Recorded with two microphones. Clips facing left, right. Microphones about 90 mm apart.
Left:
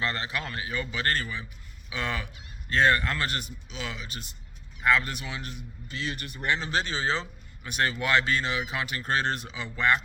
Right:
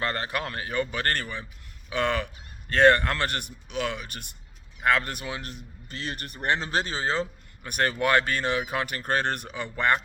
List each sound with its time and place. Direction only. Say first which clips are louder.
0.0 s a man's voice: right 2 dB; 55° right (ahead or behind)